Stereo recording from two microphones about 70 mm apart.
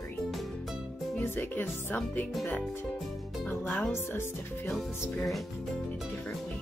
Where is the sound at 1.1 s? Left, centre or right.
Left.